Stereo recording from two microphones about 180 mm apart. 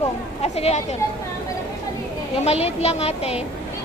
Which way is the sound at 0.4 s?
35° left (ahead or behind).